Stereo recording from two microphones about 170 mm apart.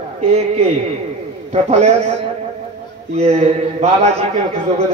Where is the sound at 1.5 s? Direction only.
40° right (ahead or behind).